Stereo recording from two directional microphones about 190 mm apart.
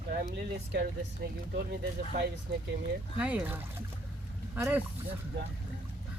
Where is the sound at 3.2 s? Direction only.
5° right (ahead or behind).